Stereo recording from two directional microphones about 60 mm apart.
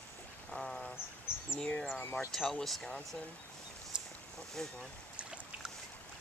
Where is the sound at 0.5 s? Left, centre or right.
Centre.